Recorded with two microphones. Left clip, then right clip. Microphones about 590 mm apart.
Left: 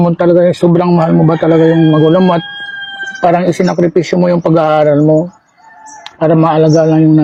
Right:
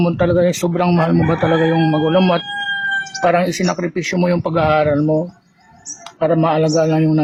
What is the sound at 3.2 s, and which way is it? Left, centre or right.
Speech, left.